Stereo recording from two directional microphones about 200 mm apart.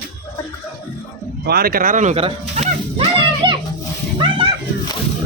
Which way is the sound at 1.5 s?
50° right (ahead or behind).